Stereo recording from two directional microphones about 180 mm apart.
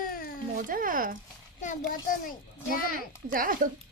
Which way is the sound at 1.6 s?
50° left (ahead or behind).